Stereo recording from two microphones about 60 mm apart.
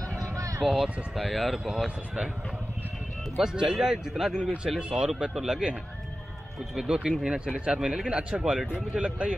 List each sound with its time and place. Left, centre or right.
0.3 s a sound: right
0.6 s speech: centre
1.1 s speech: centre
3.3 s speech: centre
6.9 s speech: centre